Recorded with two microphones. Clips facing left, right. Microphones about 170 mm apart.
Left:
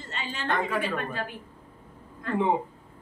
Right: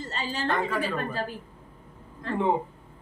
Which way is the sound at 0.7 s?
35° right (ahead or behind).